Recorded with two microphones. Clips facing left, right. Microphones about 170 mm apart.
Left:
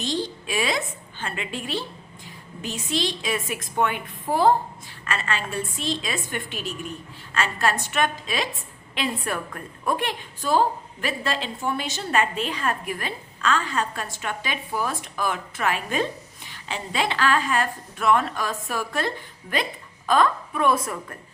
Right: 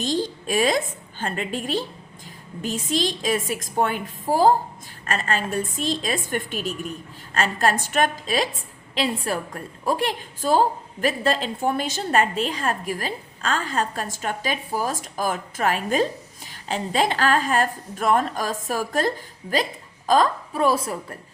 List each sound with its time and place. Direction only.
0.0 s a woman's voice: 45° right (ahead or behind)